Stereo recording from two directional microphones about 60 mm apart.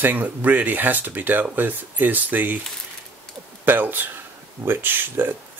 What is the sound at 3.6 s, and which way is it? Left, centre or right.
Speech, right.